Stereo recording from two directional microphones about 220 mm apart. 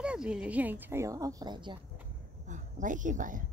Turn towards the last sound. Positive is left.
turn(degrees=-35)  # may be behind; listen again after turning